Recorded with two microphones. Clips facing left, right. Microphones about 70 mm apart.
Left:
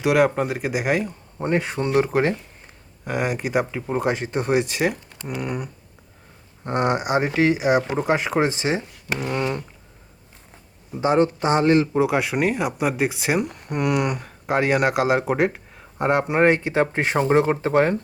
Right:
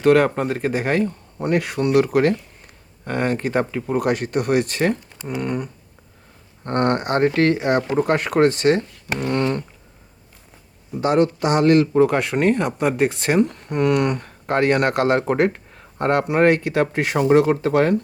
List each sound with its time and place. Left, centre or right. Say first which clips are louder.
0.0 s speech: right 3 dB; centre
1.4 s speech: right 2 dB; left
3.0 s speech: right 2 dB; centre
5.1 s speech: right 3 dB; centre
5.4 s speech: right 4 dB; centre
6.7 s speech: right 2 dB; centre
11.0 s speech: right 1 dB; left
16.2 s speech: right 3 dB; left